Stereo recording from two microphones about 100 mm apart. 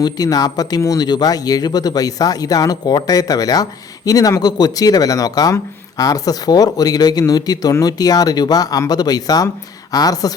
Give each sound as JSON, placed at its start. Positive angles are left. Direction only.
{"t": 0.0, "sound": "speech", "side_deg": 40}